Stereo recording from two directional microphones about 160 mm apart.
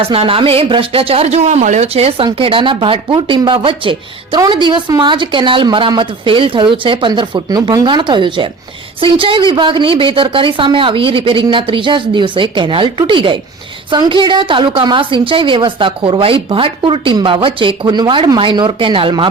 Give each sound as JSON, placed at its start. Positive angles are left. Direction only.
{"t": 0.0, "sound": "speech", "side_deg": -35}